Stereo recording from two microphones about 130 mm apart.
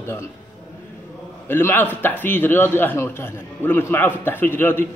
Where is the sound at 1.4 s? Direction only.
15° left (ahead or behind).